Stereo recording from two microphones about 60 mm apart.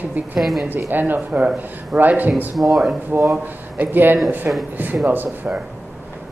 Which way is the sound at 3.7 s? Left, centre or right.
Right.